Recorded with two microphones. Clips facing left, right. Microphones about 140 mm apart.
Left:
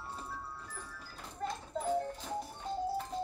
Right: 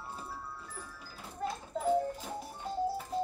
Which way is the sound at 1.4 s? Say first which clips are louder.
Right 3 dB; 5° right (ahead or behind).